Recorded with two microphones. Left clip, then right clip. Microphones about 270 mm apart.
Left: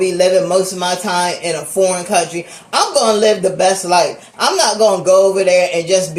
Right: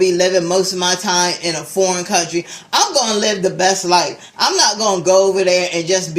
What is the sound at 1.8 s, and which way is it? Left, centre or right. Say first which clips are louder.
Speech: left 2 dB; right.